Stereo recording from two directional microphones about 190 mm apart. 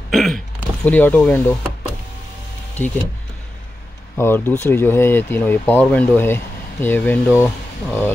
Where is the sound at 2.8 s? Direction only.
10° left (ahead or behind).